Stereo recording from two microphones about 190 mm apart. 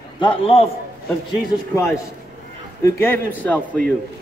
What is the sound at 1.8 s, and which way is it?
A man's voice, 15° left (ahead or behind).